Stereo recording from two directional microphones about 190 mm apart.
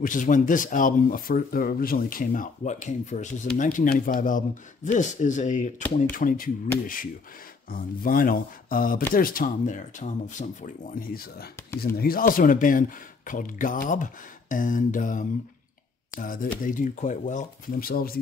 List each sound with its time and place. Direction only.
0.0 s speech: 45° left (ahead or behind)
7.7 s speech: 50° left (ahead or behind)